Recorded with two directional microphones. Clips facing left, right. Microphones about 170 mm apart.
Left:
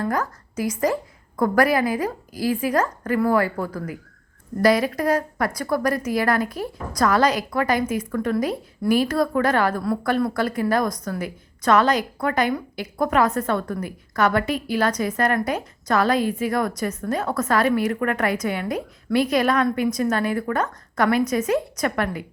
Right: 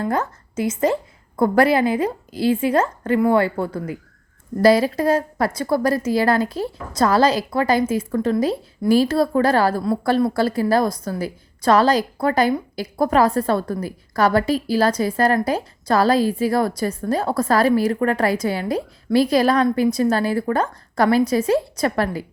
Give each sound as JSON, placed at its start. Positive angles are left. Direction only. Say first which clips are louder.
{"t": 0.0, "sound": "a woman's voice", "louder": "right 2 dB", "side_deg": -25}